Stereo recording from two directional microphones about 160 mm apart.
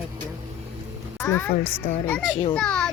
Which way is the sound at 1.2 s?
15° left (ahead or behind).